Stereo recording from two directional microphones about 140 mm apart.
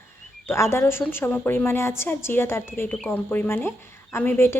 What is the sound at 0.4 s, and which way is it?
A woman's voice, 20° left (ahead or behind).